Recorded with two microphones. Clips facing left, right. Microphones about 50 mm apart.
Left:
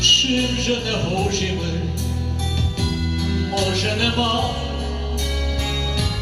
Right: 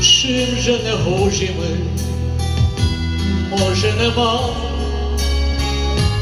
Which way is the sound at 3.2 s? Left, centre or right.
Right.